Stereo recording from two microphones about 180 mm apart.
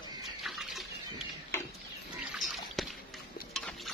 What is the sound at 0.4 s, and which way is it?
Water, centre (ahead or behind).